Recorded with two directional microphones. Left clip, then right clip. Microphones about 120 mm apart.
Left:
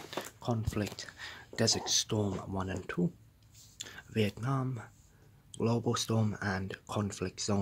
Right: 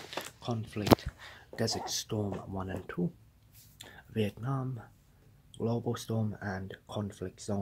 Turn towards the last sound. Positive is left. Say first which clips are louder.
# left 3 dB
turn(degrees=15)  # may be behind; listen again after turning